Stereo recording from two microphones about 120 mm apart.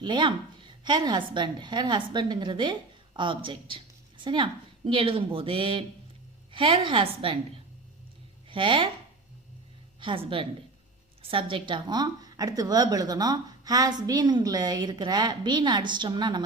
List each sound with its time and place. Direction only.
0.0 s a woman's voice: 40° right (ahead or behind)
8.4 s speech: 45° right (ahead or behind)
10.0 s a woman's voice: 45° right (ahead or behind)